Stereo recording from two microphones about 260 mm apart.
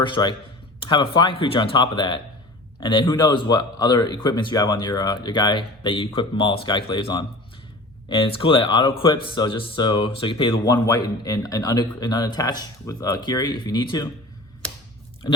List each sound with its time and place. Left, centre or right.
0.0 s speech: centre